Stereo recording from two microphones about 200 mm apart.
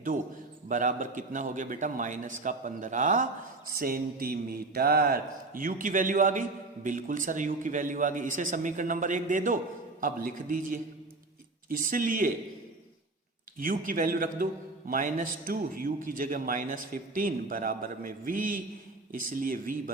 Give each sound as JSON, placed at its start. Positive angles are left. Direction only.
{"t": 0.7, "sound": "a man's voice", "side_deg": -40}
{"t": 13.6, "sound": "a man's voice", "side_deg": -45}